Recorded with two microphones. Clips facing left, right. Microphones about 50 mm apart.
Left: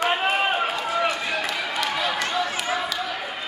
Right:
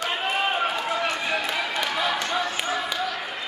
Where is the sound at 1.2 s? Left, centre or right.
Centre.